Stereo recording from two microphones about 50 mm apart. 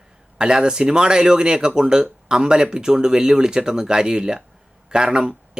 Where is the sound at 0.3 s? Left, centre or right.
Centre.